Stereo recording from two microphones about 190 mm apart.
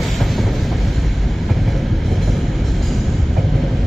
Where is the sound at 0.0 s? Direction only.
Centre (ahead or behind).